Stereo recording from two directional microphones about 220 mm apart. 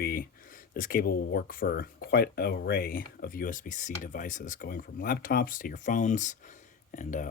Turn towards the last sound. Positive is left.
turn(degrees=35)  # may be behind; listen again after turning